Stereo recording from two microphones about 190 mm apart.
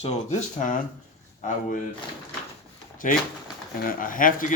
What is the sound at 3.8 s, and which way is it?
Speech, 45° left (ahead or behind).